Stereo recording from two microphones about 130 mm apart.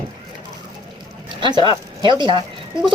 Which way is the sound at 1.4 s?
35° right (ahead or behind).